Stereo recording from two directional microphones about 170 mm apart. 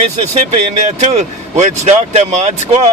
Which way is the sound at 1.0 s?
40° right (ahead or behind).